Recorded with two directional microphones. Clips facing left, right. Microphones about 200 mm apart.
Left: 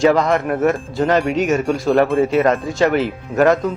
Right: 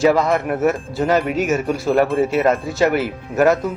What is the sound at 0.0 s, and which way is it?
Speech, 5° right (ahead or behind).